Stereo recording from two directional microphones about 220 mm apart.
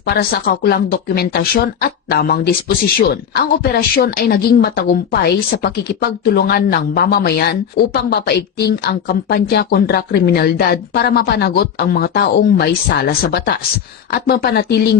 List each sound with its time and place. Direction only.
0.0 s speech: 45° left (ahead or behind)